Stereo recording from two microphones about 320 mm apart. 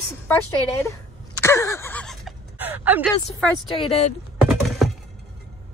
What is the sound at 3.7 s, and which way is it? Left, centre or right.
Speech, centre.